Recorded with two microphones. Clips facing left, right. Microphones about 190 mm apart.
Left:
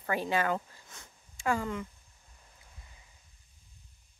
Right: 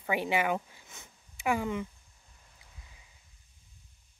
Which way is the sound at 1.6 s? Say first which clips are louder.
Right 2 dB; 15° right (ahead or behind).